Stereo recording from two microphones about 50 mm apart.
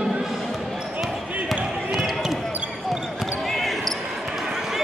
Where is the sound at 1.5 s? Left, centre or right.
Centre.